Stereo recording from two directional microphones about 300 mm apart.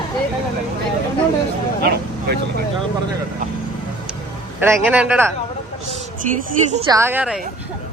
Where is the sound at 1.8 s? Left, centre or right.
Right.